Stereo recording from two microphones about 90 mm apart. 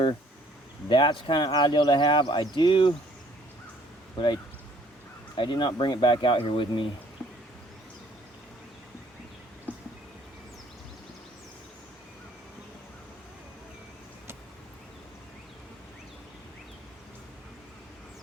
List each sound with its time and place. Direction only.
0.9 s speech: 65° left (ahead or behind)
5.4 s speech: 60° left (ahead or behind); by 6.8 s 75° left (ahead or behind)
9.7 s a sound: 15° left (ahead or behind)